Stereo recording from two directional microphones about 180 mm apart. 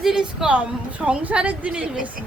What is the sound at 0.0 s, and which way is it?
A woman's voice, centre (ahead or behind).